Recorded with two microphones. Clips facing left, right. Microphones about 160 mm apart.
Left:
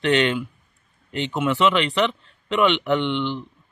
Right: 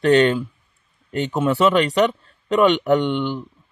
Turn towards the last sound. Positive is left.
turn(degrees=-45)  # may be behind; listen again after turning